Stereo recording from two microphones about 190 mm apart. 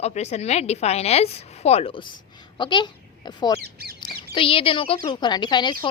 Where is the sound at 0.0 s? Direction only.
35° left (ahead or behind).